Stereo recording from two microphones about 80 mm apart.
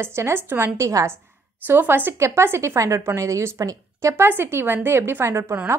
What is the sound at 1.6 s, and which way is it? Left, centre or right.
A woman's voice, right.